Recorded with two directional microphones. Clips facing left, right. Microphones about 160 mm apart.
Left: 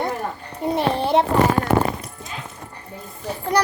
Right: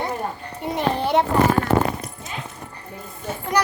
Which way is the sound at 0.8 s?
25° left (ahead or behind).